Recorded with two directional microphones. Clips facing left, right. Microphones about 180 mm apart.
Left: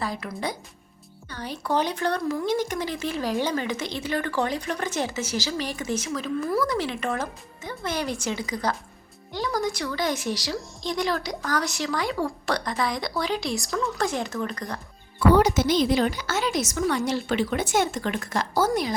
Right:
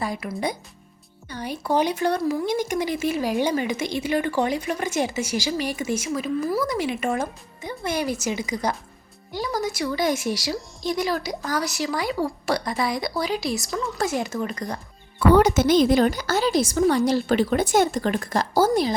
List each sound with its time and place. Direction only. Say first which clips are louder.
0.0 s speech: right 3 dB; 10° right (ahead or behind)
15.3 s a woman's voice: right 3 dB; 55° right (ahead or behind); by 18.9 s 30° right (ahead or behind)